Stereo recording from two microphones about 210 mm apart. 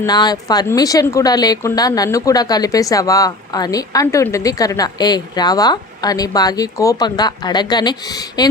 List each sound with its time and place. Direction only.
0.0 s speech: 20° left (ahead or behind)